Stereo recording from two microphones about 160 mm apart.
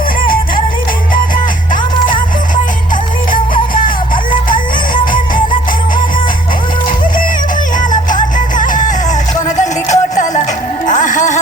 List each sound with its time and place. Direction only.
1.7 s music: 55° left (ahead or behind)
3.3 s music: 60° left (ahead or behind)
7.8 s music: 50° left (ahead or behind)